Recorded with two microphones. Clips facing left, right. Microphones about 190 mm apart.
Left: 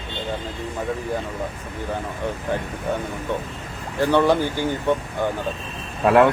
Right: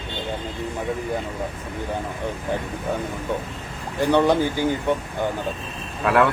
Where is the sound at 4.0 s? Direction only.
15° right (ahead or behind).